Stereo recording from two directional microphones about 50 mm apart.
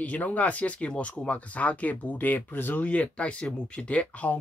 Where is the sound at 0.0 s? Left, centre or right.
Left.